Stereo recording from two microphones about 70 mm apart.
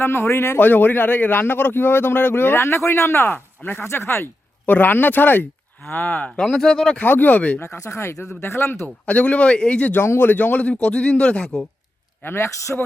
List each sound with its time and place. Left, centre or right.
0.0 s speech: left
0.6 s a man's voice: left
6.4 s speech: centre
7.0 s a man's voice: left
7.6 s speech: left
9.0 s a man's voice: left
9.9 s a man's voice: left; by 11.6 s centre
12.2 s speech: left